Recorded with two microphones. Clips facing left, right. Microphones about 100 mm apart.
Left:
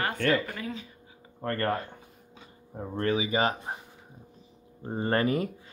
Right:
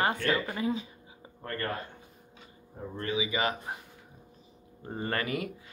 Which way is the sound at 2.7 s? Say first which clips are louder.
Left 4 dB; 50° left (ahead or behind).